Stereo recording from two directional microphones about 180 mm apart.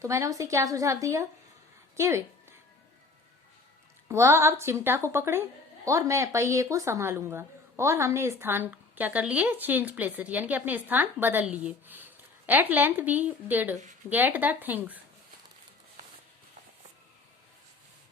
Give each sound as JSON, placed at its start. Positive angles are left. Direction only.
{"t": 0.0, "sound": "a woman's voice", "side_deg": -15}
{"t": 2.0, "sound": "a sound", "side_deg": -15}
{"t": 4.1, "sound": "a woman's voice", "side_deg": -15}